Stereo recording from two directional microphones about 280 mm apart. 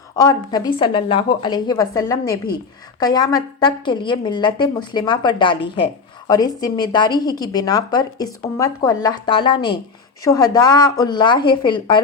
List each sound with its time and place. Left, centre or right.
0.2 s a woman's voice: centre